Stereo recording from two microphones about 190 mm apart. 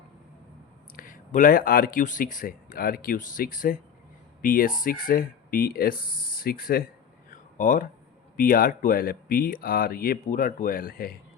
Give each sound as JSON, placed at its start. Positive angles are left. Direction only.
{"t": 0.9, "sound": "speech", "side_deg": 45}
{"t": 7.3, "sound": "a sound", "side_deg": 45}
{"t": 8.4, "sound": "speech", "side_deg": 50}